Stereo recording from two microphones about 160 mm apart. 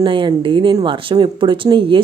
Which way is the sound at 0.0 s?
30° right (ahead or behind).